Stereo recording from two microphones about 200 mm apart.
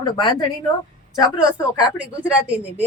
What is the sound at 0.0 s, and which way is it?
Speech, 25° left (ahead or behind).